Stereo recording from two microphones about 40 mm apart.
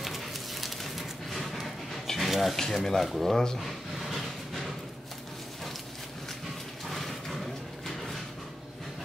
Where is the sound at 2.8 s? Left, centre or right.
Centre.